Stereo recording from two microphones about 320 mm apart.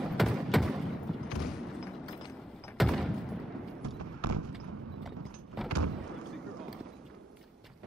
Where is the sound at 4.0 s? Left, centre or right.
Right.